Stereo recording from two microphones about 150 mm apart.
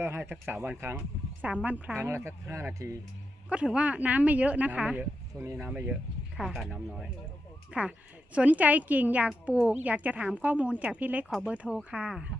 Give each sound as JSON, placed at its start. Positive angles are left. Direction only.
{"t": 0.0, "sound": "a woman's voice", "side_deg": -15}
{"t": 3.5, "sound": "a woman's voice", "side_deg": -5}